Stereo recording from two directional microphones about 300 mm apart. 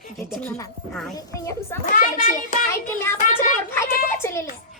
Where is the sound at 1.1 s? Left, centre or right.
Centre.